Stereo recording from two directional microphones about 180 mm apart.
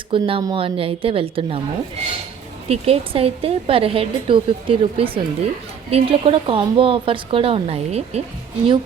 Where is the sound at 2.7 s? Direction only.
30° right (ahead or behind).